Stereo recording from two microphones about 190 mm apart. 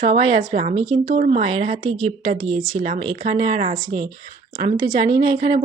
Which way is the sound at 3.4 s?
45° right (ahead or behind).